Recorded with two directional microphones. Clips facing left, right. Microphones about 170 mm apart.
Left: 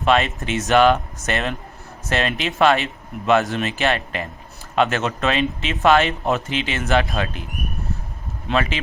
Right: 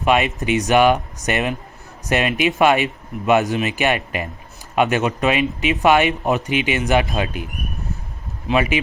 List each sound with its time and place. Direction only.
0.0 s speech: 15° right (ahead or behind)
8.5 s speech: 15° right (ahead or behind)